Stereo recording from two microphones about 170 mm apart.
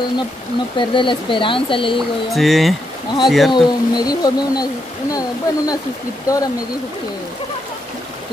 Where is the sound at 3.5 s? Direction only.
25° left (ahead or behind).